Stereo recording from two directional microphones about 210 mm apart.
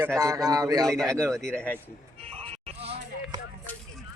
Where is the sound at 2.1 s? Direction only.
25° right (ahead or behind).